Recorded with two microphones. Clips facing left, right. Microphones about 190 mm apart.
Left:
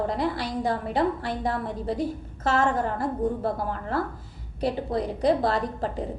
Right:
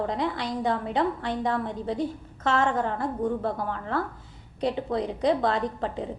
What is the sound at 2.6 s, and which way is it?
A woman's voice, 40° left (ahead or behind).